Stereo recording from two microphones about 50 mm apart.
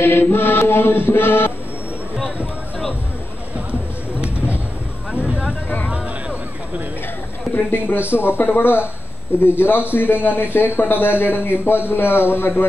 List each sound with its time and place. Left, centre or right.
0.0 s speech: left
5.1 s speech: right
7.5 s speech: left